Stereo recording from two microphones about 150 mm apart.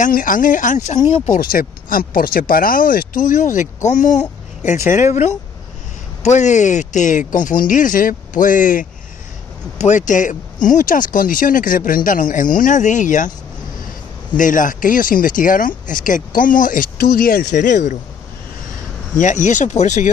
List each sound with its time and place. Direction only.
0.0 s speech: 65° left (ahead or behind)
1.3 s speech: 70° left (ahead or behind)
14.3 s speech: 60° left (ahead or behind); by 17.6 s 85° left
17.6 s speech: 55° left (ahead or behind)
19.1 s speech: 55° left (ahead or behind)